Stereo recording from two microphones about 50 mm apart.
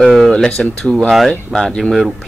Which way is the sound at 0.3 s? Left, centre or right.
Centre.